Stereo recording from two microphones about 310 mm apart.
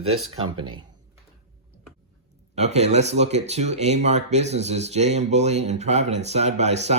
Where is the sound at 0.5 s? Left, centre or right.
Centre.